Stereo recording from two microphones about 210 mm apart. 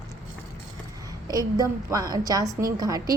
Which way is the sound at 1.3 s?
20° right (ahead or behind).